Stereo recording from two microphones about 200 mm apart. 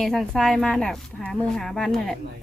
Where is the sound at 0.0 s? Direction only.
Centre (ahead or behind).